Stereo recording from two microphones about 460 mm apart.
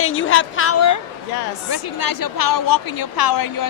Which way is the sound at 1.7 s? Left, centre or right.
Left.